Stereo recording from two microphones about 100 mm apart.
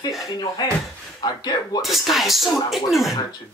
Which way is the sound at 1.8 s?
Centre (ahead or behind).